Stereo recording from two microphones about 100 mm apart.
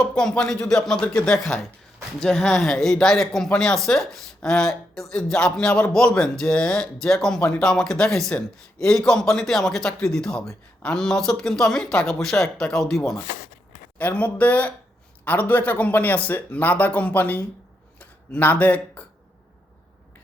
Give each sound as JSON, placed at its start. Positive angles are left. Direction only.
{"t": 0.0, "sound": "speech", "side_deg": 10}
{"t": 14.0, "sound": "speech", "side_deg": 15}